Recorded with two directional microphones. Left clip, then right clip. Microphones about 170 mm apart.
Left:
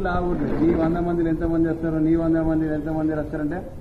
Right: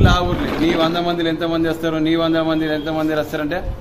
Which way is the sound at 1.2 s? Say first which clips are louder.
Right 4 dB; 45° right (ahead or behind).